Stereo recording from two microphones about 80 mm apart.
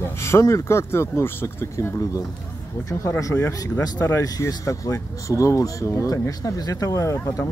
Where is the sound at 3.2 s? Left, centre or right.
Left.